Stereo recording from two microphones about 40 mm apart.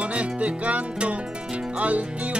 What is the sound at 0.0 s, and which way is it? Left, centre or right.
Music, right.